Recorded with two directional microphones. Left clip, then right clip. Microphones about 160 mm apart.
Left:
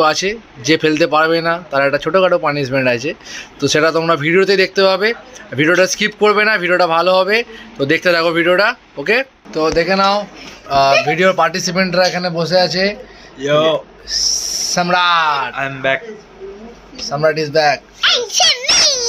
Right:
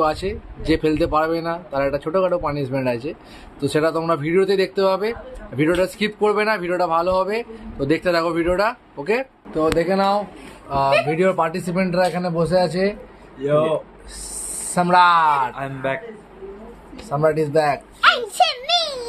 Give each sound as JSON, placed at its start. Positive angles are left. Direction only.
{"t": 0.0, "sound": "a man's voice", "side_deg": 5}
{"t": 9.7, "sound": "a man's voice", "side_deg": -5}
{"t": 13.4, "sound": "speech", "side_deg": 0}
{"t": 14.7, "sound": "a man's voice", "side_deg": -15}
{"t": 17.1, "sound": "a man's voice", "side_deg": -20}
{"t": 18.0, "sound": "a sound", "side_deg": -60}